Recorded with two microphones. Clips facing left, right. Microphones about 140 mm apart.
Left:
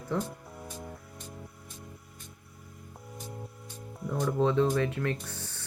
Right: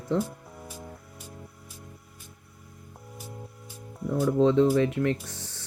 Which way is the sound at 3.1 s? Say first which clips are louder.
Even; 5° right (ahead or behind).